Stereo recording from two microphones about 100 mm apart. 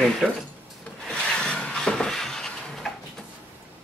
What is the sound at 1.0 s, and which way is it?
Wood, 10° left (ahead or behind).